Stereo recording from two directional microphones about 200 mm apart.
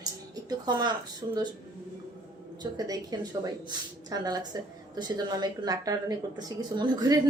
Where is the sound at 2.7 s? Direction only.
20° right (ahead or behind).